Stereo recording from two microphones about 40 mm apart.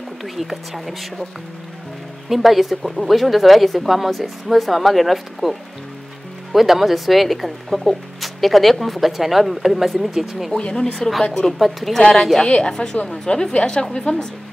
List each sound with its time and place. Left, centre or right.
0.2 s speech: centre
2.2 s speech: centre
10.5 s a woman's voice: left
11.3 s speech: centre
12.0 s a woman's voice: centre
12.4 s a woman's voice: left